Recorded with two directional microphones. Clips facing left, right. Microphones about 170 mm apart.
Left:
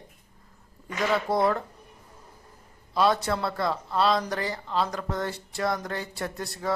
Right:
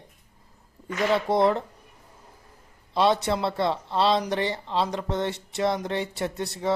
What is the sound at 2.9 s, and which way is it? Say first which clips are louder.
Speech: right 2 dB; 25° right (ahead or behind).